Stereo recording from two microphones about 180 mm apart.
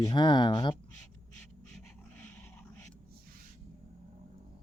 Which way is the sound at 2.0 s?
10° left (ahead or behind).